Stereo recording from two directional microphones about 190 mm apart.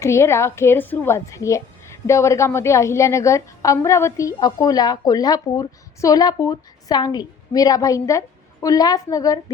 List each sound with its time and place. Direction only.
0.0 s a woman's voice: 15° left (ahead or behind)